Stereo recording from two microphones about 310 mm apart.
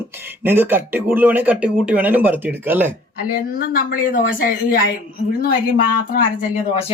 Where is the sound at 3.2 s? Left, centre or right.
Left.